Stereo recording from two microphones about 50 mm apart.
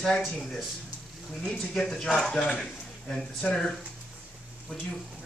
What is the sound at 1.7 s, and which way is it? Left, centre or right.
Speech, centre.